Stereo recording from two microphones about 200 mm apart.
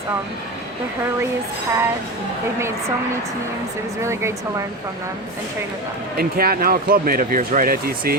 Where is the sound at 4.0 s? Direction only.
15° right (ahead or behind).